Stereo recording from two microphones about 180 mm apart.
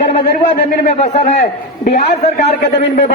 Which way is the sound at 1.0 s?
40° left (ahead or behind).